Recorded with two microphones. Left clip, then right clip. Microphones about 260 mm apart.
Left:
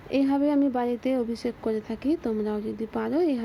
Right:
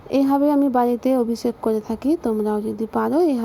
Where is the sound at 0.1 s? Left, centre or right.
Centre.